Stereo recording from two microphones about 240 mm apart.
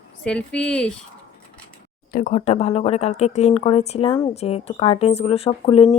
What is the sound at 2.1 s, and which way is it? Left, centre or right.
Speech, left.